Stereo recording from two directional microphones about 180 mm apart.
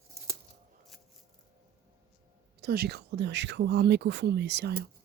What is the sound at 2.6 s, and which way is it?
Speech, 60° right (ahead or behind).